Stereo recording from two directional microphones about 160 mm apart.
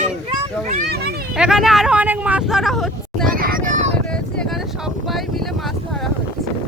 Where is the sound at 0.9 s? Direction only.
90° right.